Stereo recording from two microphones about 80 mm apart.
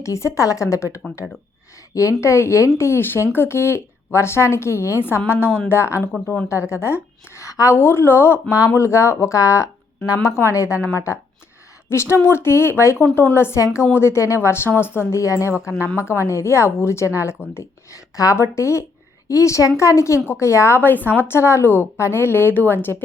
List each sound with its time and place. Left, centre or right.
0.0 s a woman's voice: left
7.8 s a woman's voice: left